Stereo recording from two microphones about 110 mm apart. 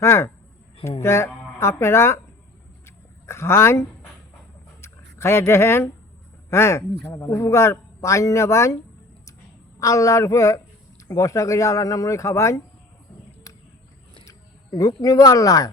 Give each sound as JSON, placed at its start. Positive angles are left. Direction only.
{"t": 0.0, "sound": "speech", "side_deg": 25}
{"t": 2.8, "sound": "dog", "side_deg": 25}
{"t": 4.8, "sound": "a sound", "side_deg": 25}
{"t": 6.5, "sound": "speech", "side_deg": 25}
{"t": 7.0, "sound": "speech", "side_deg": 10}
{"t": 7.3, "sound": "speech", "side_deg": 25}
{"t": 9.8, "sound": "speech", "side_deg": 30}
{"t": 14.8, "sound": "speech", "side_deg": 30}